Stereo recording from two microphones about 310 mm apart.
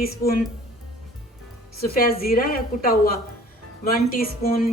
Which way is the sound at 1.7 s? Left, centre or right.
Left.